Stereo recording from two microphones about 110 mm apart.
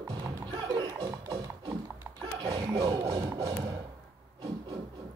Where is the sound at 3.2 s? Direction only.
30° right (ahead or behind).